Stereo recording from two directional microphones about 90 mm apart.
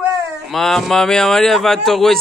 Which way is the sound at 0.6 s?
5° left (ahead or behind).